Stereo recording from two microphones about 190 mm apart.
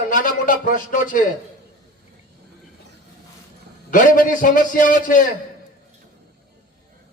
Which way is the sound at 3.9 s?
45° left (ahead or behind).